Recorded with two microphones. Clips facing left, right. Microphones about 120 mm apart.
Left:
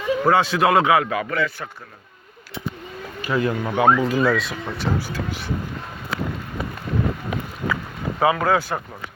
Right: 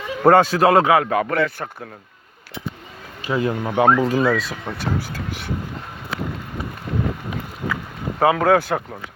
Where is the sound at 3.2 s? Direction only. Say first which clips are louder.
Even; 25° right (ahead or behind).